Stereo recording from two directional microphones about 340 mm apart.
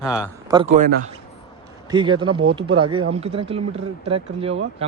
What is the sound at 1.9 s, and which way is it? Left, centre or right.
Speech, centre.